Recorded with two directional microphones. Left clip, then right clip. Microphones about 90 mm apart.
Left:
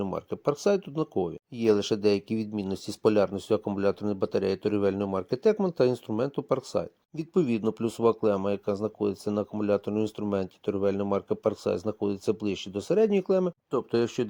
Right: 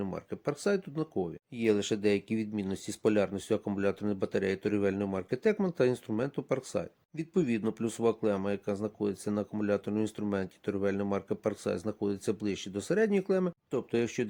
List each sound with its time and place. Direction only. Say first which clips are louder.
0.0 s speech: left 6 dB; 35° left (ahead or behind); by 6.8 s 20° left (ahead or behind)
7.2 s speech: left 4 dB; 35° left (ahead or behind)